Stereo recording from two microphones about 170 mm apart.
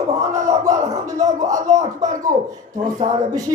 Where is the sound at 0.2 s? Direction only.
20° right (ahead or behind).